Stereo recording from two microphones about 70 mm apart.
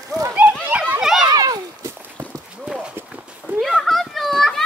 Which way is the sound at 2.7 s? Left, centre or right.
Centre.